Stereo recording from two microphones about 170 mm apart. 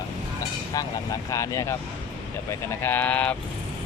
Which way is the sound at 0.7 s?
20° left (ahead or behind).